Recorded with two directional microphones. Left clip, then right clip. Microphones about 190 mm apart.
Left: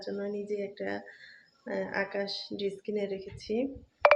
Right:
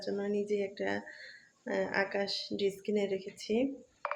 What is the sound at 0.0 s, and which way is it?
Speech, 15° right (ahead or behind).